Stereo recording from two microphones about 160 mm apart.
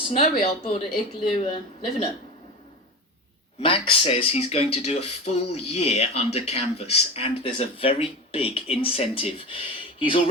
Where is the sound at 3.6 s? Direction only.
35° left (ahead or behind).